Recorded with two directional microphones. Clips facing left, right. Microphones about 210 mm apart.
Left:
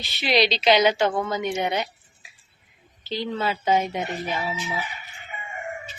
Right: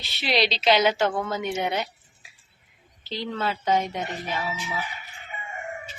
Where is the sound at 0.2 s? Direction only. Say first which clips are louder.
Left 3 dB; centre (ahead or behind).